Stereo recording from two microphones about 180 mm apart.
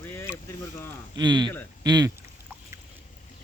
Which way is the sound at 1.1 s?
25° right (ahead or behind).